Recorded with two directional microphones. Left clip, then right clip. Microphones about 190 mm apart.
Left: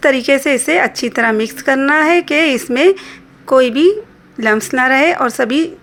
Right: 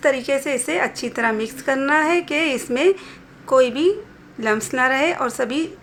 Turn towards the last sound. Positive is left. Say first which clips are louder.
# left 8 dB
turn(degrees=30)  # may be behind; listen again after turning